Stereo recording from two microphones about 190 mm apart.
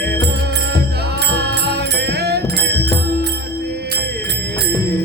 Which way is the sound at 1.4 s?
60° right (ahead or behind).